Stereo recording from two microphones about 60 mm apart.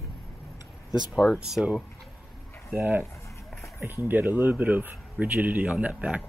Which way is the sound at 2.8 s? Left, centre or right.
Right.